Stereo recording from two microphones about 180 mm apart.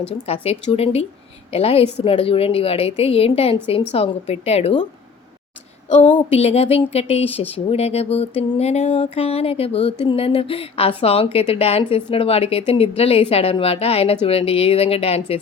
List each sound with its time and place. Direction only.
0.4 s speech: 35° left (ahead or behind)
6.1 s speech: 35° left (ahead or behind)